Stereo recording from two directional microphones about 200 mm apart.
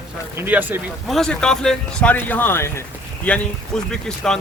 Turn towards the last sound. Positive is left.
turn(degrees=5)  # may be behind; listen again after turning